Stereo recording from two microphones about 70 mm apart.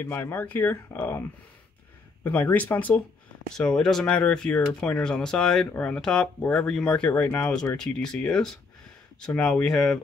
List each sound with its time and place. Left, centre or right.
0.0 s speech: left
2.2 s speech: left
3.5 s speech: centre
5.7 s speech: centre